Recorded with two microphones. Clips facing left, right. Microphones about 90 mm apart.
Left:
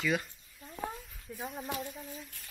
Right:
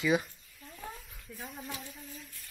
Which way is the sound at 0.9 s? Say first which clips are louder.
Left 2 dB; centre (ahead or behind).